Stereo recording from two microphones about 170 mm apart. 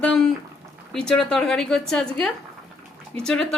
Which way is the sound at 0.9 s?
5° left (ahead or behind).